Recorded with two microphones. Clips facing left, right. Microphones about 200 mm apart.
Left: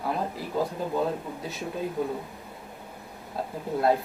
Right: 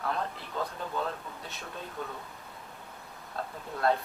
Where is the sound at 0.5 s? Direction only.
25° left (ahead or behind).